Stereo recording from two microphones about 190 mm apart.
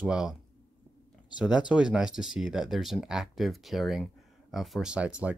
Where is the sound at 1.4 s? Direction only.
5° right (ahead or behind).